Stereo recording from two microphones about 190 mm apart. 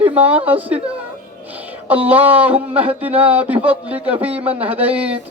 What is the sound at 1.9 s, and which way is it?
Speech, 10° right (ahead or behind).